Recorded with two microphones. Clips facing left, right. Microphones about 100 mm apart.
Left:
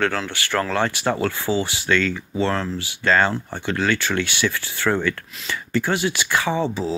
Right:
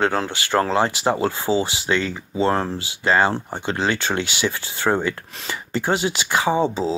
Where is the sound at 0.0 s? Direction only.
25° right (ahead or behind).